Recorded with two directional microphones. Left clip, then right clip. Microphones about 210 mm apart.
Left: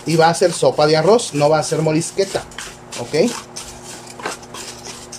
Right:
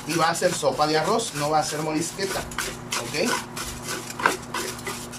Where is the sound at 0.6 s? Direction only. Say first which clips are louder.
Left 10 dB; 50° left (ahead or behind).